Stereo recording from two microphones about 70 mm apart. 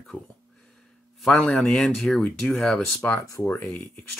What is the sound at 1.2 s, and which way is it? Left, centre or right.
Speech, centre.